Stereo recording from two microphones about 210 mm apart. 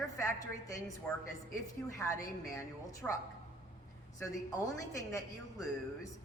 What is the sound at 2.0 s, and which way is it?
A woman's voice, 15° left (ahead or behind).